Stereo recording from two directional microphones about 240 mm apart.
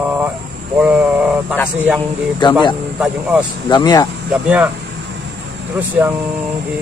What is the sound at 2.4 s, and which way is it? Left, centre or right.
Speech, centre.